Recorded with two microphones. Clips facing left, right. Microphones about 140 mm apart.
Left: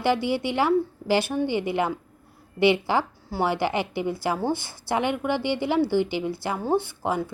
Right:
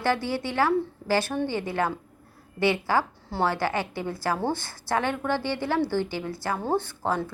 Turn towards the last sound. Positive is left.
turn(degrees=15)  # may be behind; listen again after turning